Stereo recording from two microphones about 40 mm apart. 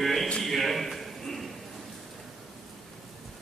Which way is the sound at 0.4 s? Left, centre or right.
Centre.